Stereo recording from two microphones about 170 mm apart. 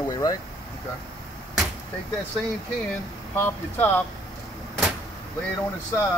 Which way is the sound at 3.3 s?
15° left (ahead or behind).